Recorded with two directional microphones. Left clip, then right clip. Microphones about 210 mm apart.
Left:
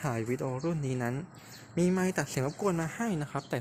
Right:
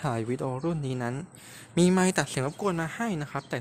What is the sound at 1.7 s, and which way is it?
Speech, 30° right (ahead or behind).